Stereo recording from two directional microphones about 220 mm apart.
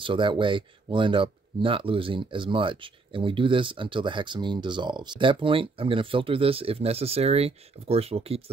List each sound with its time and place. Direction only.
0.0 s speech: 20° right (ahead or behind)